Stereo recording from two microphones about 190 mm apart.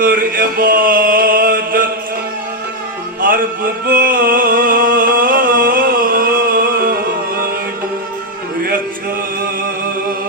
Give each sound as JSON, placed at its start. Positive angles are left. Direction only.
{"t": 0.0, "sound": "chant", "side_deg": -50}
{"t": 3.2, "sound": "music", "side_deg": -50}